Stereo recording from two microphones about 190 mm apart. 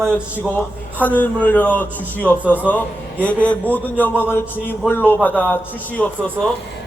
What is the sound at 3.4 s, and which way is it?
A man's voice, 10° left (ahead or behind).